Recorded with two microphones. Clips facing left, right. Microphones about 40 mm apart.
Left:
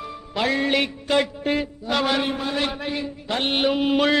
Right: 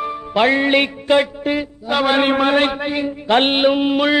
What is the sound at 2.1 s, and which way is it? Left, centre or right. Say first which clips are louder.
Speech: right 9 dB; right.